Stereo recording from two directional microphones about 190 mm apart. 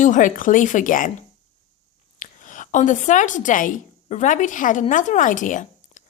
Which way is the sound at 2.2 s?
45° left (ahead or behind).